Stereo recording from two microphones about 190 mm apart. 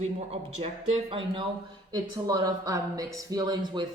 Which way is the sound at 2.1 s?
20° right (ahead or behind).